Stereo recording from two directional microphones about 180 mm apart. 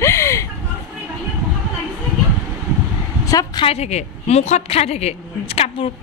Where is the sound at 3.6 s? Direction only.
35° left (ahead or behind).